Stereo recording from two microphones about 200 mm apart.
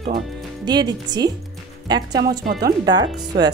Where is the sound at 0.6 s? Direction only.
20° right (ahead or behind).